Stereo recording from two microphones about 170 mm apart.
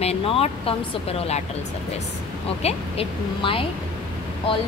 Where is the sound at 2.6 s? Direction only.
35° left (ahead or behind).